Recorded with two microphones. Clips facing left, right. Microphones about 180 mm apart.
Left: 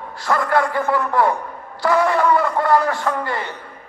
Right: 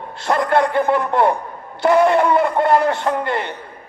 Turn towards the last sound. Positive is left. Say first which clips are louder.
# right 3 dB
turn(degrees=-20)  # may be behind; listen again after turning